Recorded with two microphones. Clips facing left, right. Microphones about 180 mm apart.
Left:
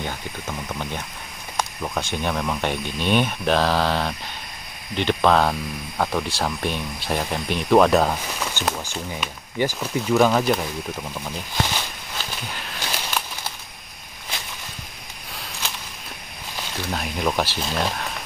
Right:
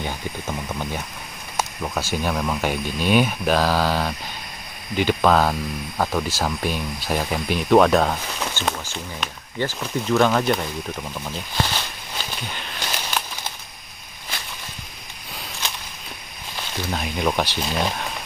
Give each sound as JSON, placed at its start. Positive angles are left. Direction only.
{"t": 0.0, "sound": "speech", "side_deg": -10}
{"t": 8.6, "sound": "speech", "side_deg": 15}
{"t": 12.4, "sound": "a sound", "side_deg": 5}
{"t": 16.9, "sound": "speech", "side_deg": 0}